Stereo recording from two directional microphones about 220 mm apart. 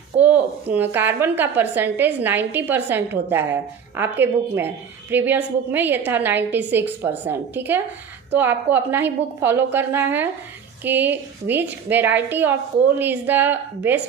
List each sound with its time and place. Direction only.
0.7 s a woman's voice: 10° right (ahead or behind)